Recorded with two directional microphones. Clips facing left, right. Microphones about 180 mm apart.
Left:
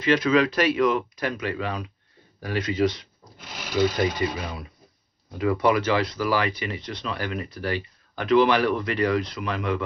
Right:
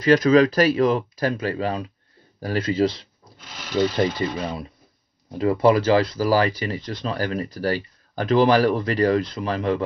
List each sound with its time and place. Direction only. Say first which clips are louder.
0.0 s speech: right 5 dB; 40° right (ahead or behind)